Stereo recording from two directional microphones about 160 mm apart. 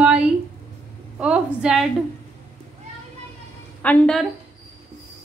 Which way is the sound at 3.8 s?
10° left (ahead or behind).